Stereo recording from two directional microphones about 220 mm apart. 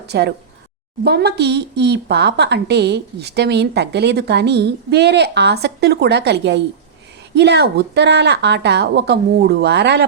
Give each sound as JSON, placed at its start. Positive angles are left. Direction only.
{"t": 0.1, "sound": "a woman's voice", "side_deg": -50}